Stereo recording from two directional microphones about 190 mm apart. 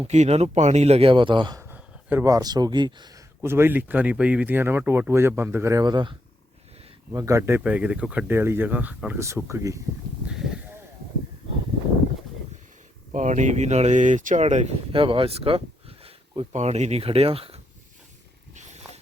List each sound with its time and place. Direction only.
0.0 s speech: 35° right (ahead or behind)
1.6 s speech: 10° right (ahead or behind)
3.4 s speech: 10° right (ahead or behind)
10.2 s a sound: 5° right (ahead or behind)
13.1 s speech: 40° right (ahead or behind)